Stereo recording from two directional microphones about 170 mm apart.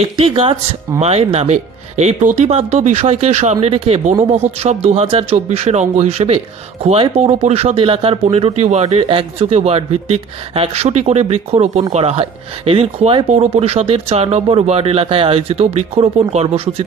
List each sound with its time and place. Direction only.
0.2 s speech: 35° right (ahead or behind)